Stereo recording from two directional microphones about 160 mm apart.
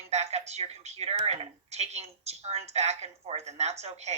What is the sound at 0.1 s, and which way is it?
A woman's voice, 45° right (ahead or behind).